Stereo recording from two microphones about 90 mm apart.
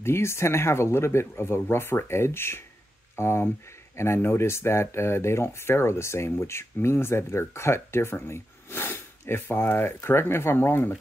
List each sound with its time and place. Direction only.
0.0 s speech: 30° left (ahead or behind)